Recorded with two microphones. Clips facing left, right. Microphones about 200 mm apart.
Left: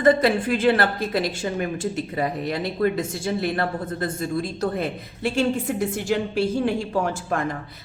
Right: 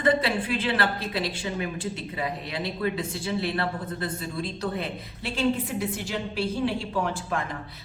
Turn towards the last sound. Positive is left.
turn(degrees=45)  # may be behind; listen again after turning